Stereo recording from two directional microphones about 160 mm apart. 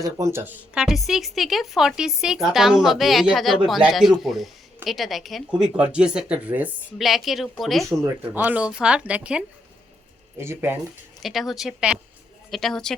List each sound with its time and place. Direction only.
0.0 s speech: 20° right (ahead or behind); by 7.9 s centre (ahead or behind)
7.9 s speech: 15° right (ahead or behind)
11.2 s speech: centre (ahead or behind)